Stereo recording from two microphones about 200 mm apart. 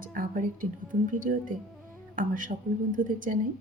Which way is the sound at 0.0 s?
45° right (ahead or behind).